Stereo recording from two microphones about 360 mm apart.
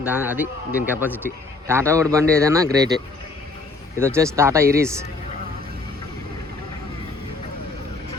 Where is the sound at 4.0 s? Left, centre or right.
Centre.